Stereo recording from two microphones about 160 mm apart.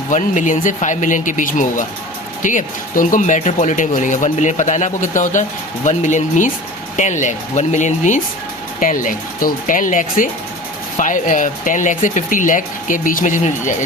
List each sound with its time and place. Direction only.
0.1 s speech: 50° left (ahead or behind)